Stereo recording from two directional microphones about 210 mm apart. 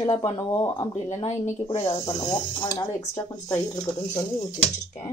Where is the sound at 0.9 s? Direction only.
30° left (ahead or behind); by 4.4 s 15° left (ahead or behind).